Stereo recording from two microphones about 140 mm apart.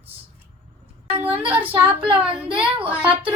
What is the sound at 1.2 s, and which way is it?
Speech, 15° right (ahead or behind).